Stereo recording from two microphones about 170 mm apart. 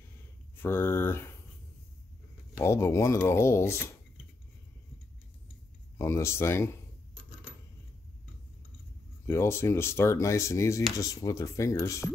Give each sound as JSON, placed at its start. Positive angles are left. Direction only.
{"t": 0.6, "sound": "speech", "side_deg": 15}
{"t": 2.6, "sound": "speech", "side_deg": 15}
{"t": 5.9, "sound": "speech", "side_deg": 15}
{"t": 9.2, "sound": "speech", "side_deg": 15}